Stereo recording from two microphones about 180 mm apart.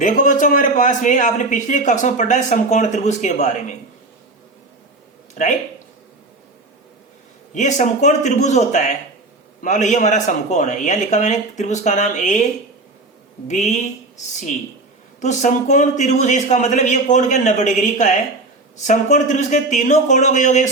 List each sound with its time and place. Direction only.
0.0 s a man's voice: 45° left (ahead or behind)
5.3 s speech: 40° left (ahead or behind)
7.5 s a man's voice: 40° left (ahead or behind)
13.5 s a man's voice: 40° left (ahead or behind)
15.2 s a man's voice: 40° left (ahead or behind)